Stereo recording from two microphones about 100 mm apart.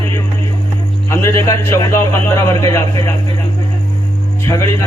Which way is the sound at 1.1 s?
30° left (ahead or behind).